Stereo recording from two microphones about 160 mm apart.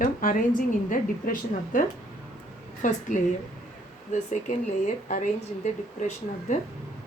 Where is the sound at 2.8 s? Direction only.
55° left (ahead or behind).